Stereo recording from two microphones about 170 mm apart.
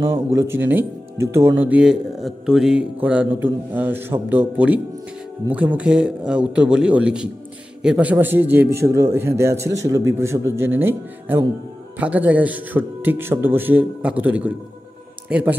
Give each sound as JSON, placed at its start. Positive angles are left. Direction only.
{"t": 0.0, "sound": "a man's voice", "side_deg": -15}